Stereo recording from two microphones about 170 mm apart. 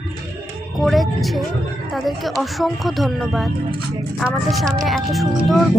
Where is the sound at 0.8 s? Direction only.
Centre (ahead or behind).